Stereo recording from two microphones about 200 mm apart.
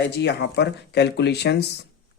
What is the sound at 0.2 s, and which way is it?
Speech, 55° left (ahead or behind).